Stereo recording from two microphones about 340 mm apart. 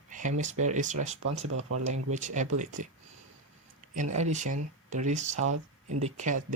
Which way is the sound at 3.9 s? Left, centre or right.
Right.